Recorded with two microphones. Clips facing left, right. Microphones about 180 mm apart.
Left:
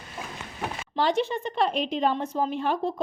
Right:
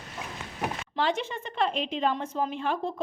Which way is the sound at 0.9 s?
35° left (ahead or behind).